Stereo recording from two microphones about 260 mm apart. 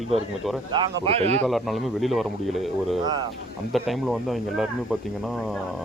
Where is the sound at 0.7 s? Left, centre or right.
Right.